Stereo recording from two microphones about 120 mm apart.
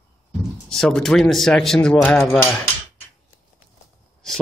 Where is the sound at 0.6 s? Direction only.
5° left (ahead or behind).